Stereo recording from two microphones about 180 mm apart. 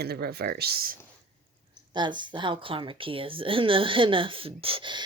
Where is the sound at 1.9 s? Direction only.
25° right (ahead or behind).